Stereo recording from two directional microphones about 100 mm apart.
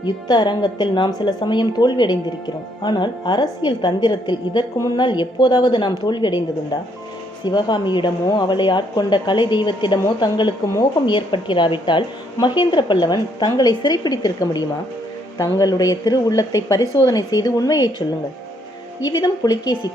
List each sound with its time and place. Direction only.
0.0 s a woman's voice: 45° left (ahead or behind)
7.4 s a woman's voice: 50° left (ahead or behind)
19.0 s speech: 40° left (ahead or behind)